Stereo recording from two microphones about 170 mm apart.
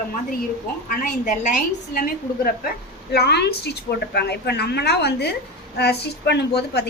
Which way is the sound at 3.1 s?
75° left (ahead or behind).